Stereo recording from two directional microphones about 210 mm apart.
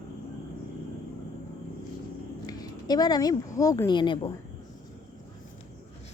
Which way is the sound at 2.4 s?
20° left (ahead or behind).